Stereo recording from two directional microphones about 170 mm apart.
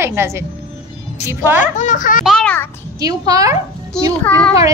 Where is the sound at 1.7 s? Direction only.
50° left (ahead or behind).